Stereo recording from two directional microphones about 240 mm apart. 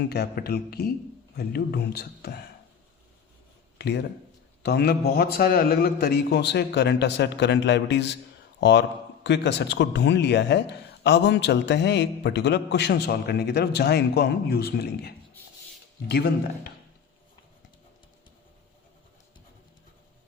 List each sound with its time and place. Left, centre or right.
0.1 s speech: left
3.8 s a man's voice: left
9.2 s a man's voice: left